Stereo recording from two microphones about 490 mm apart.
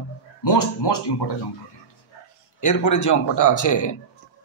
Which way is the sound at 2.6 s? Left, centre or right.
Left.